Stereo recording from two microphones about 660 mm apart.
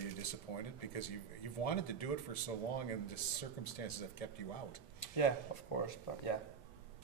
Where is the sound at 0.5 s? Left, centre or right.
Left.